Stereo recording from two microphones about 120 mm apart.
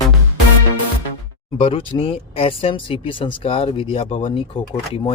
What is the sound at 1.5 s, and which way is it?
Speech, 50° left (ahead or behind).